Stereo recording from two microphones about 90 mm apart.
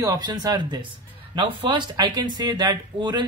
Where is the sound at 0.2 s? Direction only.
50° right (ahead or behind).